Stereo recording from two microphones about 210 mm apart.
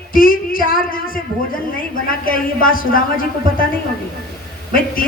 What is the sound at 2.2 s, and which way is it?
A man's voice, 40° left (ahead or behind).